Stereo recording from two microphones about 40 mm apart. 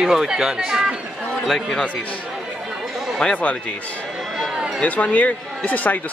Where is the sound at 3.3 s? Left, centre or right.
Left.